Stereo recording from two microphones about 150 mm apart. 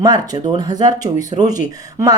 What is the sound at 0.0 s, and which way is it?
A woman's voice, 25° right (ahead or behind).